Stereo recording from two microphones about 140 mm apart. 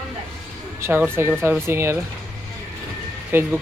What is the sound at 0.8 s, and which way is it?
Speech, 15° right (ahead or behind).